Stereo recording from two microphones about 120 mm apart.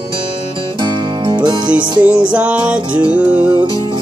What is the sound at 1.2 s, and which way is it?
Music, 40° right (ahead or behind).